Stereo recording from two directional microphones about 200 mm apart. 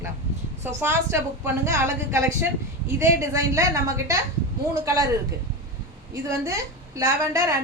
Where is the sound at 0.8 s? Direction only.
10° right (ahead or behind).